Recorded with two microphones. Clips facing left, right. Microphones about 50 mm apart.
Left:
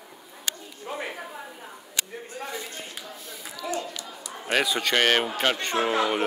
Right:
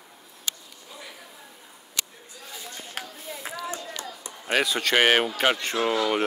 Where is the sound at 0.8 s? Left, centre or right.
Left.